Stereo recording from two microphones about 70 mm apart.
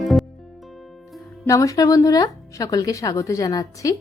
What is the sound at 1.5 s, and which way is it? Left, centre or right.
A woman's voice, left.